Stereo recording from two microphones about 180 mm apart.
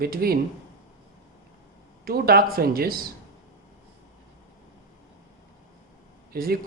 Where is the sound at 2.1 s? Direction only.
55° right (ahead or behind).